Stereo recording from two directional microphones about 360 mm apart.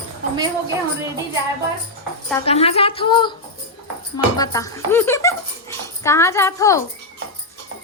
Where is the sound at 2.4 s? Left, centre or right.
Centre.